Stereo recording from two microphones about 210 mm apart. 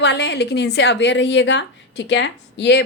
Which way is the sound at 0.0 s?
55° left (ahead or behind).